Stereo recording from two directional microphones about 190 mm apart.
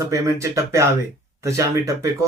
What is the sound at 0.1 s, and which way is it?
Speech, 15° right (ahead or behind).